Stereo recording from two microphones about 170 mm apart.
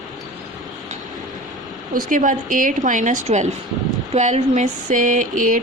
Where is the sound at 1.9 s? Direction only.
50° right (ahead or behind).